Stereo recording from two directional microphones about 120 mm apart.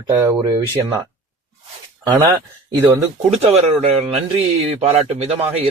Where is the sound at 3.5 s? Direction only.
60° right (ahead or behind).